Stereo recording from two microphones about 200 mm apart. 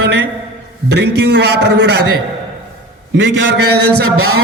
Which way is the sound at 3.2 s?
65° right (ahead or behind).